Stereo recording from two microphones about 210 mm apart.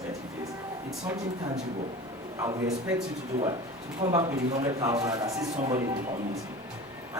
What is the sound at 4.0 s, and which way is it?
A man's voice, 20° right (ahead or behind).